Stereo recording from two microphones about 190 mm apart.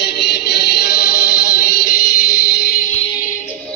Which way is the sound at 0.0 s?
60° left (ahead or behind).